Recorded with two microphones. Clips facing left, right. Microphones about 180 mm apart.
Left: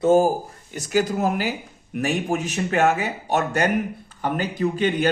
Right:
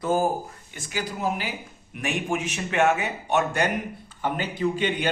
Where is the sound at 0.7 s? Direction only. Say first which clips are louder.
Left 10 dB; 40° left (ahead or behind).